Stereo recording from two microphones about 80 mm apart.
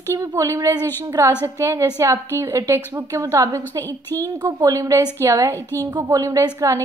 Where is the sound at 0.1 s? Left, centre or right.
Right.